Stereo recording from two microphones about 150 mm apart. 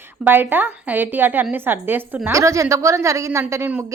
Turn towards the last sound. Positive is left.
turn(degrees=-15)  # may be behind; listen again after turning